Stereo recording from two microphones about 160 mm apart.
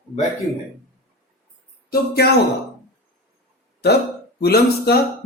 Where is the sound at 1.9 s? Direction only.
85° left.